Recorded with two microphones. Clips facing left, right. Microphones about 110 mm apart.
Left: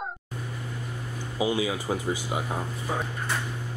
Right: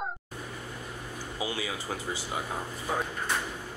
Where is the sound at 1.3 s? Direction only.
15° left (ahead or behind).